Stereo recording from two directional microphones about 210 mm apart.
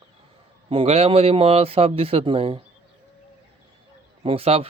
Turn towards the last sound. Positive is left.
turn(degrees=-25)  # may be behind; listen again after turning